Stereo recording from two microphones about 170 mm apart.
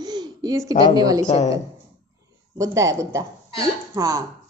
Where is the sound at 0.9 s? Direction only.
20° right (ahead or behind).